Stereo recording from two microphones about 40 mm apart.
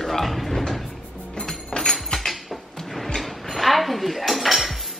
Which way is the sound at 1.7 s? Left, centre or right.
Centre.